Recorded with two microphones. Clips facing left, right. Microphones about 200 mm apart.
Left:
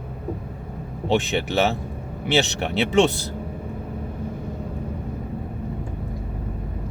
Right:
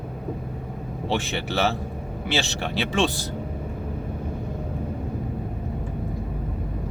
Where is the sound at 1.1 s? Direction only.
20° left (ahead or behind).